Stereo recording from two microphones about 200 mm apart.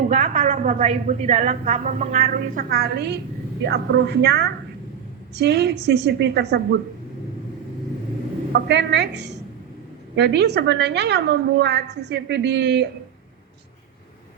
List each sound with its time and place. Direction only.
0.1 s a woman's voice: 35° right (ahead or behind); by 6.7 s 55° right (ahead or behind)
8.5 s a woman's voice: 60° right (ahead or behind)